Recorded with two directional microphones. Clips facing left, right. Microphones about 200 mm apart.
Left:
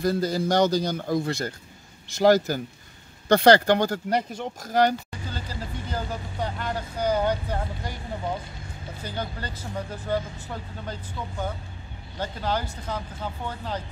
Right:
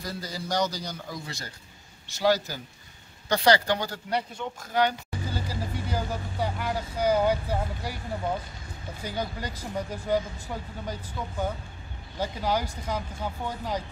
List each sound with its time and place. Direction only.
0.0 s a man's voice: 55° left (ahead or behind)
5.3 s speech: 10° right (ahead or behind)